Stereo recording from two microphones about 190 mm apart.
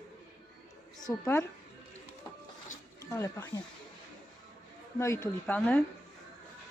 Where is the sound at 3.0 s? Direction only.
15° left (ahead or behind).